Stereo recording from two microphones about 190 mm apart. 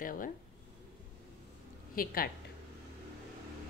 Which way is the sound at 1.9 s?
50° left (ahead or behind).